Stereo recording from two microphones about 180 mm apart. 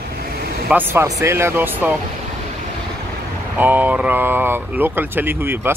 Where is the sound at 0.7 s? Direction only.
15° right (ahead or behind).